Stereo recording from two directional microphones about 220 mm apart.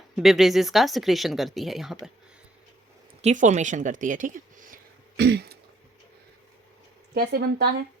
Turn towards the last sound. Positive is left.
turn(degrees=-45)  # may be behind; listen again after turning